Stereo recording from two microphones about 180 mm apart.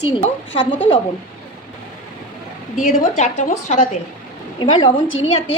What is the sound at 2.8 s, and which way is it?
A woman's voice, 40° left (ahead or behind).